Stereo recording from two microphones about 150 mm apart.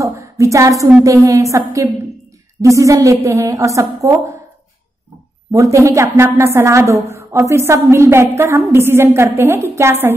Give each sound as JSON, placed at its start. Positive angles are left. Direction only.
{"t": 0.0, "sound": "a woman's voice", "side_deg": -20}
{"t": 2.6, "sound": "a woman's voice", "side_deg": -20}
{"t": 5.5, "sound": "a woman's voice", "side_deg": -20}